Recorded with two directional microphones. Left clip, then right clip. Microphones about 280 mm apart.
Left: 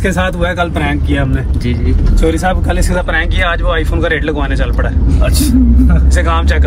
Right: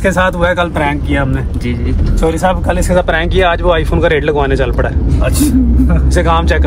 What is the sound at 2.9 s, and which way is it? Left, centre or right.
Speech, right.